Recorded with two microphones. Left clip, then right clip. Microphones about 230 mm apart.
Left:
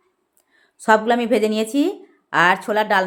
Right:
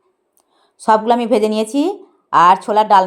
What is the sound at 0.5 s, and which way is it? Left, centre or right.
Speech, centre.